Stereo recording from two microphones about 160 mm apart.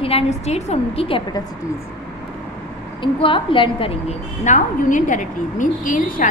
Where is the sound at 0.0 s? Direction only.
40° left (ahead or behind).